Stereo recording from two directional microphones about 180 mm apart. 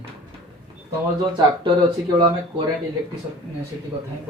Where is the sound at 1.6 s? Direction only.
25° right (ahead or behind).